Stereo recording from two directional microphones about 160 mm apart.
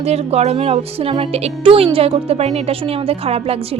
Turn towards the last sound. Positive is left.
turn(degrees=-40)  # may be behind; listen again after turning